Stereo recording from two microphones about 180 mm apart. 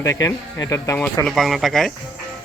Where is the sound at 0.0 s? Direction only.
15° left (ahead or behind).